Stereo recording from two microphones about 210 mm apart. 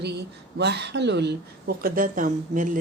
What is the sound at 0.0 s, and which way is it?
A woman's voice, 50° right (ahead or behind).